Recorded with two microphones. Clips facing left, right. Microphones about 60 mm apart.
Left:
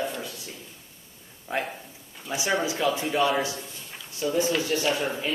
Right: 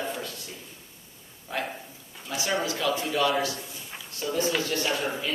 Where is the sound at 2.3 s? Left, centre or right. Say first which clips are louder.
Left 2 dB; centre.